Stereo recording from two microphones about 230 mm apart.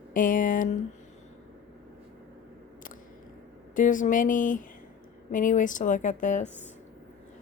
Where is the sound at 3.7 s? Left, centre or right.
Left.